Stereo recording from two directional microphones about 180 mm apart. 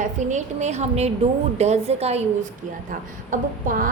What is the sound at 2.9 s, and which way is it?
A woman's voice, 50° right (ahead or behind).